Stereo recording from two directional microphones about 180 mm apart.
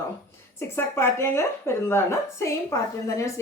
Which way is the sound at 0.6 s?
15° left (ahead or behind).